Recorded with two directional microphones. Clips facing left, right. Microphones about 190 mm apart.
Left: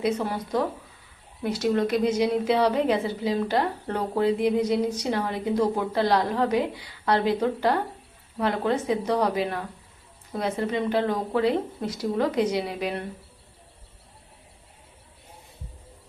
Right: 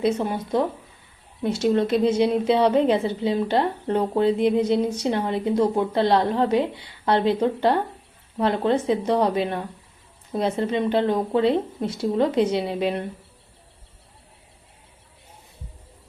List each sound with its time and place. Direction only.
0.0 s a woman's voice: 25° right (ahead or behind)